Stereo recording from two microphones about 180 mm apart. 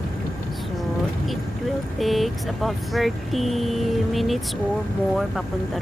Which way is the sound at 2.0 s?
Centre (ahead or behind).